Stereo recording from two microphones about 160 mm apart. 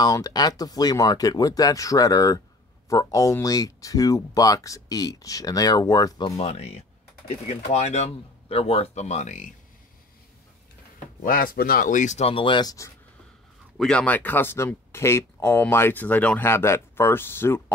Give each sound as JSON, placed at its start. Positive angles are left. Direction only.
{"t": 0.0, "sound": "speech", "side_deg": 20}
{"t": 6.3, "sound": "speech", "side_deg": 40}
{"t": 11.2, "sound": "speech", "side_deg": 65}
{"t": 13.7, "sound": "speech", "side_deg": 5}